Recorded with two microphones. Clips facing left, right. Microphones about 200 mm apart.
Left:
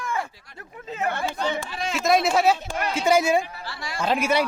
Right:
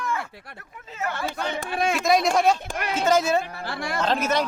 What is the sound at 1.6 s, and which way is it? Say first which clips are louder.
Speech: right 5 dB; 55° right (ahead or behind).